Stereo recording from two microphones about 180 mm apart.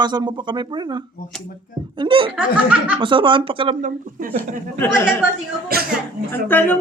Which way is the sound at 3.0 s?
25° right (ahead or behind).